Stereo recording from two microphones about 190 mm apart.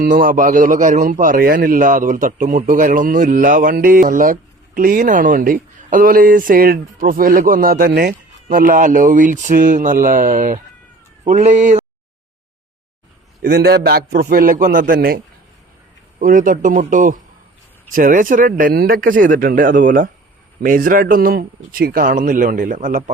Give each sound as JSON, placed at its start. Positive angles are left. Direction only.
{"t": 0.0, "sound": "a man's voice", "side_deg": -45}
{"t": 13.4, "sound": "a man's voice", "side_deg": -55}